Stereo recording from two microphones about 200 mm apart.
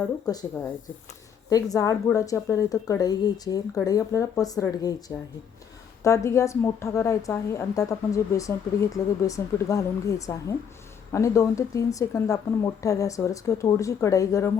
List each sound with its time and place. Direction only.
1.5 s a woman's voice: 15° left (ahead or behind)